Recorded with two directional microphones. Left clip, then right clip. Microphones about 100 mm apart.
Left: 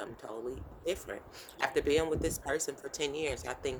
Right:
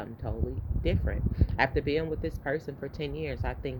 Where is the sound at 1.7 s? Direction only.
45° left (ahead or behind).